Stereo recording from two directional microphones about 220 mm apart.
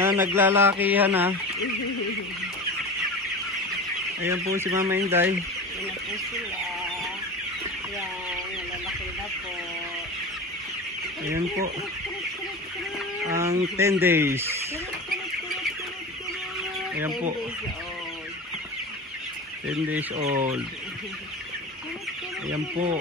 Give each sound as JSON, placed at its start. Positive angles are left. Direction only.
{"t": 0.0, "sound": "chicken", "side_deg": -10}
{"t": 4.2, "sound": "chicken", "side_deg": -10}
{"t": 13.3, "sound": "chicken", "side_deg": -15}
{"t": 20.2, "sound": "speech", "side_deg": -30}